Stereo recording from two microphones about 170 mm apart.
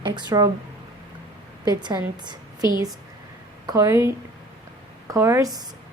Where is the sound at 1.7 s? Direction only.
25° right (ahead or behind).